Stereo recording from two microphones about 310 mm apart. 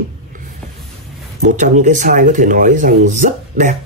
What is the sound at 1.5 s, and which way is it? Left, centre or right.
Speech, right.